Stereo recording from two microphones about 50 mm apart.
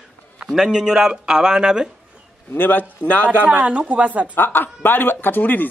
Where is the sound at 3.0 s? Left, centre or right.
Left.